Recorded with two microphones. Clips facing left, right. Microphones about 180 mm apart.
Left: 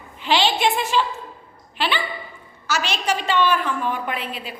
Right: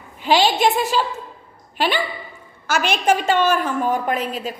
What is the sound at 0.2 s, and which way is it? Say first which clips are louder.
A woman's voice: right 3 dB; 40° right (ahead or behind).